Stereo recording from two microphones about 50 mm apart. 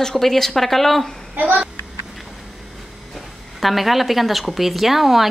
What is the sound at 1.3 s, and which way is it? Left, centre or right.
Speech, right.